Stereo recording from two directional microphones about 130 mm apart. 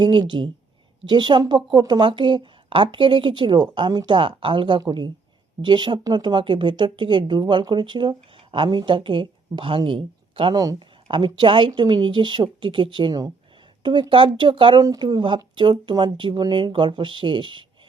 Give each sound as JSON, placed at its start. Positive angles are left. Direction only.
{"t": 0.0, "sound": "speech", "side_deg": -40}